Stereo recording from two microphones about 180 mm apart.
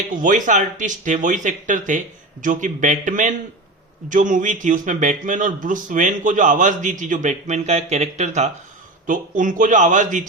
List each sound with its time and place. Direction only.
0.1 s a man's voice: 45° right (ahead or behind)